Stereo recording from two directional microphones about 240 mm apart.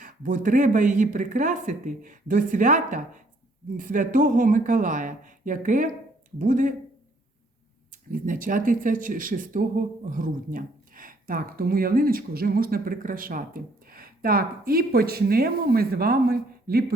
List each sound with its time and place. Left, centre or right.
0.0 s speech: right
8.1 s speech: right